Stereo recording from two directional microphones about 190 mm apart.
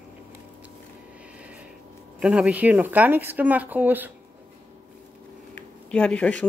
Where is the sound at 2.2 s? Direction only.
5° right (ahead or behind).